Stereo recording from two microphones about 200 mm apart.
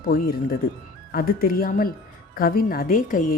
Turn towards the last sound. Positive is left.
turn(degrees=40)  # may be behind; listen again after turning